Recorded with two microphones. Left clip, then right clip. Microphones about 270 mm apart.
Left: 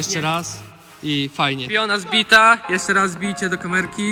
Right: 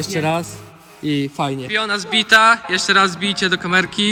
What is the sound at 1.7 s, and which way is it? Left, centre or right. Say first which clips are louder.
A man's voice: right 2 dB; centre.